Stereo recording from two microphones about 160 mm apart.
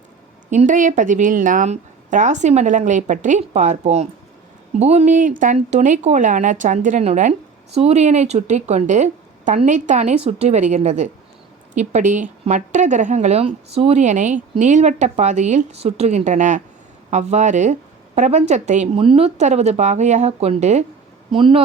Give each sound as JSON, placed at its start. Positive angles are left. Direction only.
{"t": 0.5, "sound": "speech", "side_deg": -50}
{"t": 21.2, "sound": "speech", "side_deg": -35}